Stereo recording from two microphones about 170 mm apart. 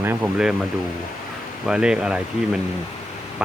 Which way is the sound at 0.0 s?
10° right (ahead or behind).